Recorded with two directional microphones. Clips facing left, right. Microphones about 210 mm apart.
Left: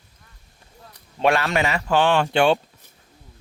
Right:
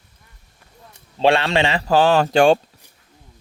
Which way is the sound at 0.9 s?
30° right (ahead or behind).